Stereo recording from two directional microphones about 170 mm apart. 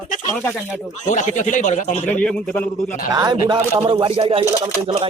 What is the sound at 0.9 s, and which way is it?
Speech, 45° left (ahead or behind).